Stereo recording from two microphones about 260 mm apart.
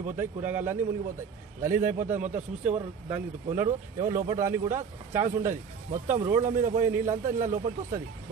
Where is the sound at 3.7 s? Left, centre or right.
Right.